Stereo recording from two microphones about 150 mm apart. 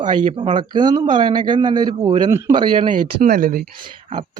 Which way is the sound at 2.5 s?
30° right (ahead or behind).